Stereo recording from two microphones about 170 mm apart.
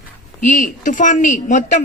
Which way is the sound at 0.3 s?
50° left (ahead or behind).